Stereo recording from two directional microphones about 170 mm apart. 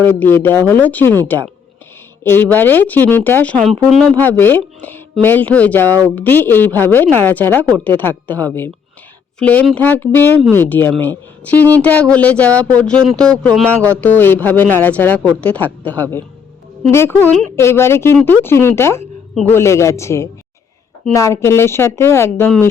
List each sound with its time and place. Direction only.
0.0 s speech: 10° left (ahead or behind)
2.2 s speech: 10° left (ahead or behind)